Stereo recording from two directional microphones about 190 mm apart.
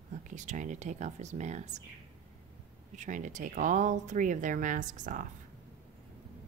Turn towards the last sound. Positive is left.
turn(degrees=-40)  # may be behind; listen again after turning